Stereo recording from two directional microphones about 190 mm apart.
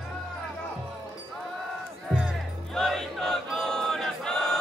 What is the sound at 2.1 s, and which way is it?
Music, 5° right (ahead or behind).